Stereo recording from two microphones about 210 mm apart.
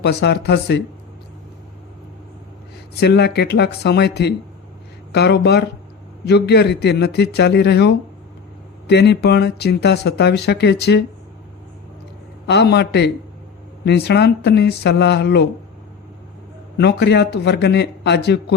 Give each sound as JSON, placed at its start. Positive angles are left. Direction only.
{"t": 0.0, "sound": "speech", "side_deg": 50}
{"t": 3.0, "sound": "speech", "side_deg": 50}
{"t": 12.5, "sound": "speech", "side_deg": 55}
{"t": 16.7, "sound": "speech", "side_deg": 55}